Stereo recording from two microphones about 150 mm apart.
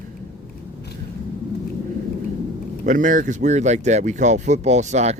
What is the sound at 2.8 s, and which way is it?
Speech, 60° right (ahead or behind).